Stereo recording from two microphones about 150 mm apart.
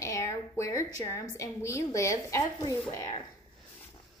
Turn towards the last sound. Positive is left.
turn(degrees=25)  # may be behind; listen again after turning